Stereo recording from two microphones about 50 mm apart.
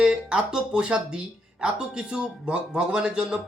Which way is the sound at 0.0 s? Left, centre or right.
Centre.